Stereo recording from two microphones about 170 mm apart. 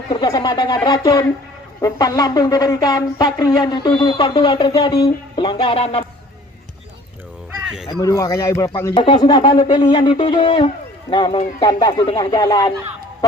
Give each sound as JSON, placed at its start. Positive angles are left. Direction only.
{"t": 0.1, "sound": "speech", "side_deg": 25}
{"t": 7.9, "sound": "speech", "side_deg": 20}